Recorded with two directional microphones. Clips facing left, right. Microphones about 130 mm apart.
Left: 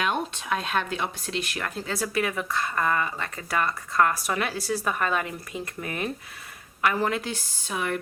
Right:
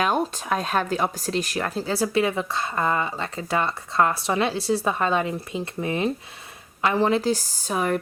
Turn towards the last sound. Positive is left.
turn(degrees=-35)  # may be behind; listen again after turning